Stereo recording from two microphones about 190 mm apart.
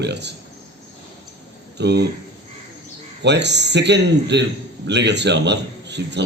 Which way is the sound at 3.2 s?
65° right (ahead or behind).